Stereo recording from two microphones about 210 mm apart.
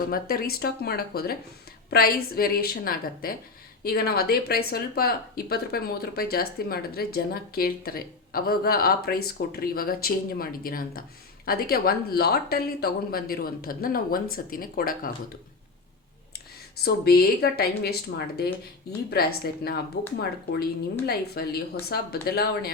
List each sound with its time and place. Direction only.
0.1 s speech: 45° left (ahead or behind)
16.8 s speech: 50° left (ahead or behind)
19.1 s speech: 45° left (ahead or behind)